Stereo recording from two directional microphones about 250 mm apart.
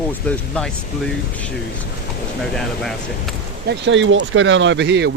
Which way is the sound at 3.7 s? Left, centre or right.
Right.